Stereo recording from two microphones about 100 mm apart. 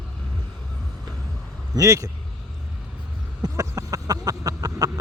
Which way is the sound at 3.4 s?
30° right (ahead or behind).